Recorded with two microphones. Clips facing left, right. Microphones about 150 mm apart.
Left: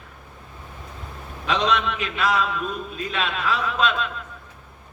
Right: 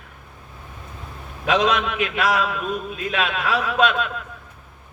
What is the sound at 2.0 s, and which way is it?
Speech, 60° right (ahead or behind).